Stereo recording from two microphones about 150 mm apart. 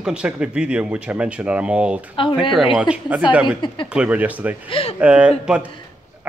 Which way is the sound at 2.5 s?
5° right (ahead or behind).